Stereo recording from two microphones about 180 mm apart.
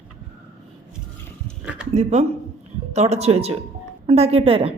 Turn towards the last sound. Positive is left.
turn(degrees=-30)  # may be behind; listen again after turning